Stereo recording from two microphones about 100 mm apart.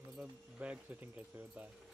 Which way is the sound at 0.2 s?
15° right (ahead or behind).